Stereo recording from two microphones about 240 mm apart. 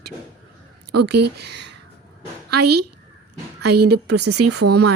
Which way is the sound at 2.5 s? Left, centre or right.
Right.